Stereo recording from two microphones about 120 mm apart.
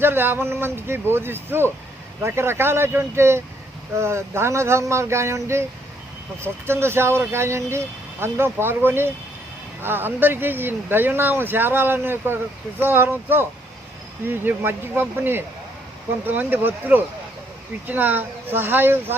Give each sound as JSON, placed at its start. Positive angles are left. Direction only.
{"t": 0.0, "sound": "speech", "side_deg": -20}